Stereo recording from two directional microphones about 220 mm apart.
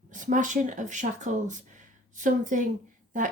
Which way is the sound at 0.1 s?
35° right (ahead or behind).